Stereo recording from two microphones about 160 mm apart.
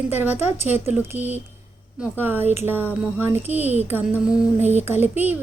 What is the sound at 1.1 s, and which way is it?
Speech, 10° right (ahead or behind).